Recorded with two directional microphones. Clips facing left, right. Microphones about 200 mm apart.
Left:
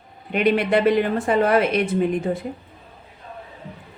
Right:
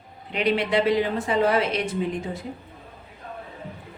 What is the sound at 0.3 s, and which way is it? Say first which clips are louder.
A woman's voice: left 4 dB; 55° left (ahead or behind).